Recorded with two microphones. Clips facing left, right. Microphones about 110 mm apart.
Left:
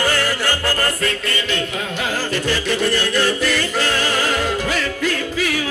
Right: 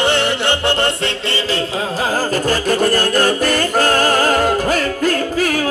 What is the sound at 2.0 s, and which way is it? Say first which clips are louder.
Music: right 4 dB; 40° right (ahead or behind).